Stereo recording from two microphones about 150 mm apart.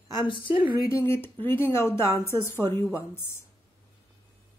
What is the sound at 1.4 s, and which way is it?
Speech, 15° left (ahead or behind).